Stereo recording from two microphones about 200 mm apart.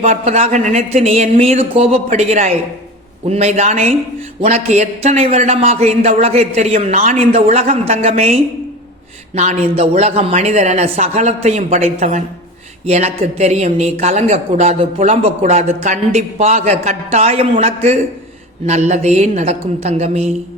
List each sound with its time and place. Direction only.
0.0 s speech: 35° right (ahead or behind)